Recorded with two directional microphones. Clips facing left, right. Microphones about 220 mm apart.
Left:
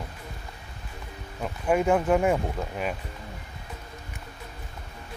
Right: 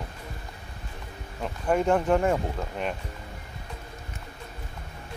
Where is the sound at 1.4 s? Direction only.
5° left (ahead or behind).